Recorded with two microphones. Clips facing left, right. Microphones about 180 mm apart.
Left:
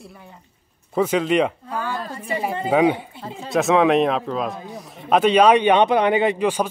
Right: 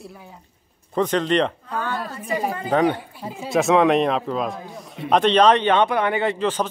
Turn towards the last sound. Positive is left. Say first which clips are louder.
# left 3 dB
turn(degrees=10)  # may be behind; listen again after turning